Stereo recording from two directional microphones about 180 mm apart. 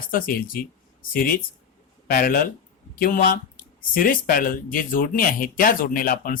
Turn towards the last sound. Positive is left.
turn(degrees=50)  # may be behind; listen again after turning